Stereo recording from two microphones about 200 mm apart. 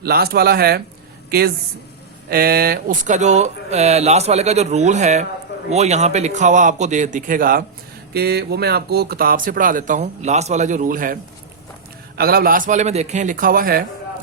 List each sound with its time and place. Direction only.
0.0 s speech: 50° right (ahead or behind)